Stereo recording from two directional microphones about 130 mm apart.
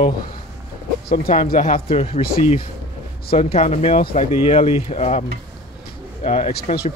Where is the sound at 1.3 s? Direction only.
85° left.